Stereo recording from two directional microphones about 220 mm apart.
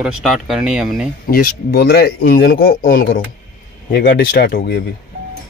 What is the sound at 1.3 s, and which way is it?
Speech, 40° left (ahead or behind).